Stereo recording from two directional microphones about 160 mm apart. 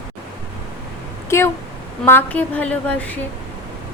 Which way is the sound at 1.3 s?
15° left (ahead or behind).